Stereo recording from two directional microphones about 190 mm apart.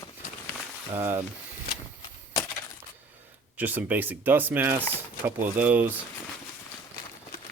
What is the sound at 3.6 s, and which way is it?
Speech, 10° right (ahead or behind).